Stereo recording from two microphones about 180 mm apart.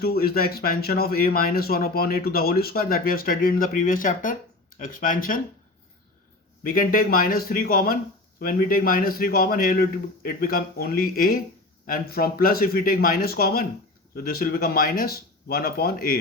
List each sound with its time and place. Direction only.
0.0 s a man's voice: 60° left (ahead or behind)
6.6 s a man's voice: 55° left (ahead or behind)